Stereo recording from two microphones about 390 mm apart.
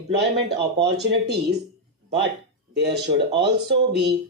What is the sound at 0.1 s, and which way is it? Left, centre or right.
Speech, right.